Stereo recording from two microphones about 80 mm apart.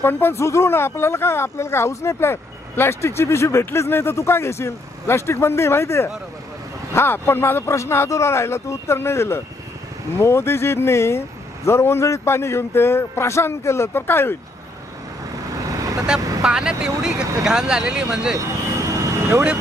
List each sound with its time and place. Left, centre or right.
0.0 s speech: left
16.0 s speech: centre
18.9 s vehicle: right